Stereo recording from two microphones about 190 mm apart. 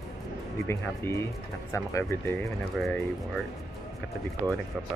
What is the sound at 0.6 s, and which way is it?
Speech, 15° left (ahead or behind).